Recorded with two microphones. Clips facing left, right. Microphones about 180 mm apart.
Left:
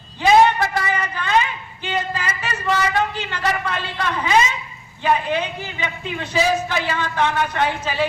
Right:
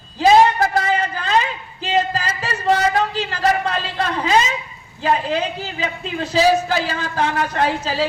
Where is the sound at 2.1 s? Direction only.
35° right (ahead or behind).